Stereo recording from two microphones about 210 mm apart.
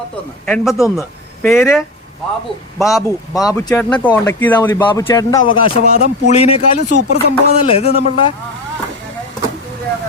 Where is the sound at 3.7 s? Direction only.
5° left (ahead or behind).